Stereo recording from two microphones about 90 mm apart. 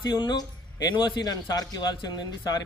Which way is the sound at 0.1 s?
55° left (ahead or behind).